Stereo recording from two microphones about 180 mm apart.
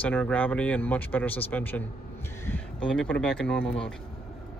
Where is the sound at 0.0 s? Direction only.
10° left (ahead or behind).